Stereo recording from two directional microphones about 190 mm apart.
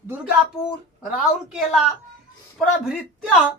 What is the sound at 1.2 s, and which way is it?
A woman's voice, centre (ahead or behind).